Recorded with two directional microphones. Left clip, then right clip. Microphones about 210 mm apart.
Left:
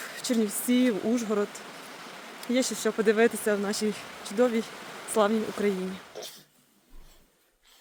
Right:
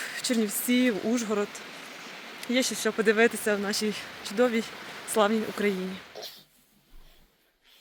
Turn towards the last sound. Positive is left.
turn(degrees=40)  # may be behind; listen again after turning